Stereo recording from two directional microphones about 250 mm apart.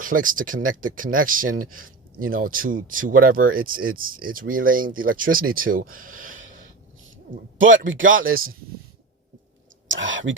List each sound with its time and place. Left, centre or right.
0.0 s speech: right
7.3 s speech: right
9.9 s speech: right